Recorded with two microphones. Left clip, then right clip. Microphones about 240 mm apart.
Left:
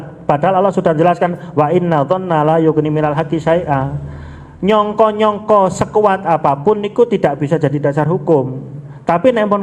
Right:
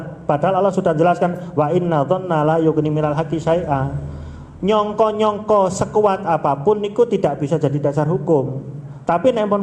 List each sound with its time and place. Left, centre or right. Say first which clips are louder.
0.3 s a man's voice: left 4 dB; left